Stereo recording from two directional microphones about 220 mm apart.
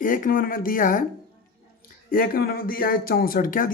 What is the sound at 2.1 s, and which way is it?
Speech, 40° left (ahead or behind).